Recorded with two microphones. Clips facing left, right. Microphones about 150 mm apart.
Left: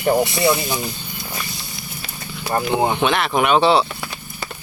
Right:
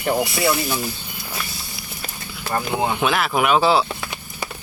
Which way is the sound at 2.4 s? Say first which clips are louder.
Left 3 dB; 20° left (ahead or behind).